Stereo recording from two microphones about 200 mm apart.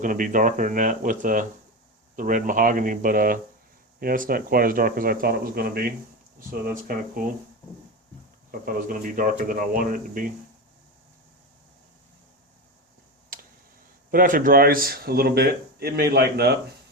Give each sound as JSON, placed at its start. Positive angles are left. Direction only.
{"t": 0.0, "sound": "speech", "side_deg": -40}
{"t": 8.6, "sound": "speech", "side_deg": -45}
{"t": 13.3, "sound": "tick", "side_deg": -45}
{"t": 14.1, "sound": "speech", "side_deg": -45}